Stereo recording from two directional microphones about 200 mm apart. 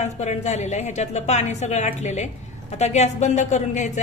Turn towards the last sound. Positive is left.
turn(degrees=35)  # may be behind; listen again after turning